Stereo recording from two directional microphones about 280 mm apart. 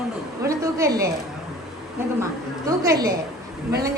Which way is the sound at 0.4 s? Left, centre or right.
Centre.